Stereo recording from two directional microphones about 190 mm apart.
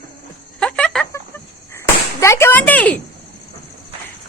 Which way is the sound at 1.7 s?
15° left (ahead or behind).